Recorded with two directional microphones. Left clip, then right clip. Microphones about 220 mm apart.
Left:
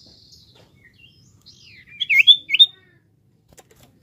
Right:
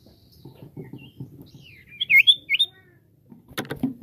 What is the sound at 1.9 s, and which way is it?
Bird, 10° right (ahead or behind).